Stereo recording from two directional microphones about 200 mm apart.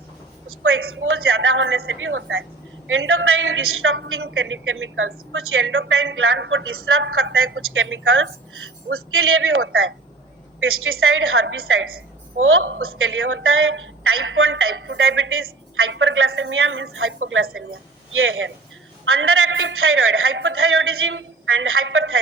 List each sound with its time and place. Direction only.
0.6 s a woman's voice: 90° right
19.0 s a woman's voice: 90° right